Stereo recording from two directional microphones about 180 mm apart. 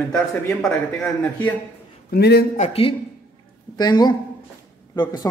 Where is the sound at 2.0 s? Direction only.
65° left (ahead or behind).